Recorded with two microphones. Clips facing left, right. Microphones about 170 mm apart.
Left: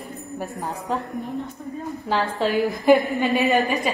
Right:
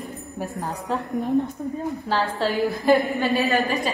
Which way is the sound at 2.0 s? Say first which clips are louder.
Left 2 dB; 20° left (ahead or behind).